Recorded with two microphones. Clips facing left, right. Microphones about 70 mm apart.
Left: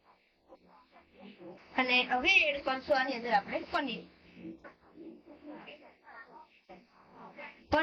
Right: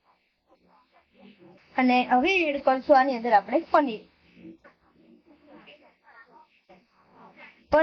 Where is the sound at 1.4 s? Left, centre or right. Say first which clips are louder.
Left 6 dB; left.